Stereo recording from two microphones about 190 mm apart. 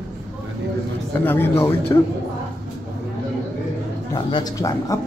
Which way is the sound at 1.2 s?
10° left (ahead or behind).